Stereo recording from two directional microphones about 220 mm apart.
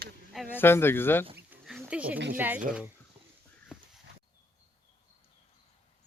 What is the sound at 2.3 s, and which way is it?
Speech, 10° right (ahead or behind).